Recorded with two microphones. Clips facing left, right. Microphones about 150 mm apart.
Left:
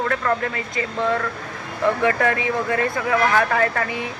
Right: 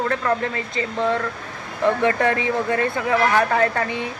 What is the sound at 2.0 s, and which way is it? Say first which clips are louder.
Speech: right 1 dB; 30° right (ahead or behind).